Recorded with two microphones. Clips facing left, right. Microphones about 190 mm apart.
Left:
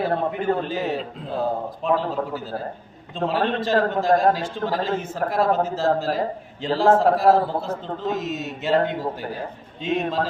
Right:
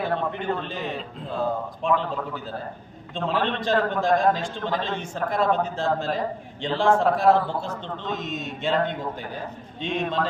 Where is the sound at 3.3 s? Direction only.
40° left (ahead or behind).